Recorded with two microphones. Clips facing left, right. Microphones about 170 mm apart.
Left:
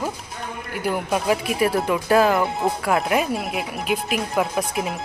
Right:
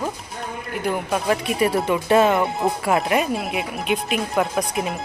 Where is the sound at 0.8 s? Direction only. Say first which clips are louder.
Even; centre (ahead or behind).